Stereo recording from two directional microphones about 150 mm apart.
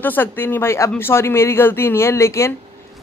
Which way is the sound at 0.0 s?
15° left (ahead or behind).